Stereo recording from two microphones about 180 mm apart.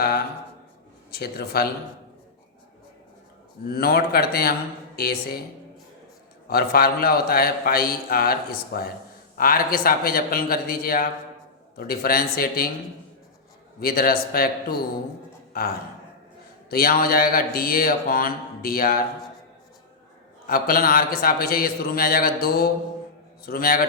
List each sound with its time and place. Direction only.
1.2 s a man's voice: 60° left (ahead or behind)
3.7 s a man's voice: 60° left (ahead or behind)
6.5 s a man's voice: 55° left (ahead or behind)
13.7 s a man's voice: 55° left (ahead or behind)
20.5 s a man's voice: 55° left (ahead or behind)